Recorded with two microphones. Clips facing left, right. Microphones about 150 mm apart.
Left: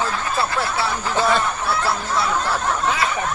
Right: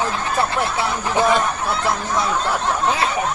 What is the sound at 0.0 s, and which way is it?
Speech, 20° right (ahead or behind).